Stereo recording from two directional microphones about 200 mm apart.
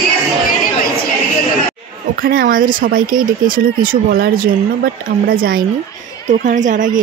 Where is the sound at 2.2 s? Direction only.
45° right (ahead or behind).